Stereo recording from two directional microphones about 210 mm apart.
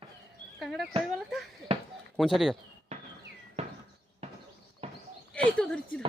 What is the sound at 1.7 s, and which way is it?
Speech, 25° right (ahead or behind).